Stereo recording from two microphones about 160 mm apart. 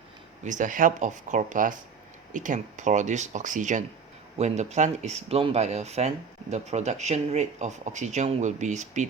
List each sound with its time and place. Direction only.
0.4 s speech: 55° right (ahead or behind)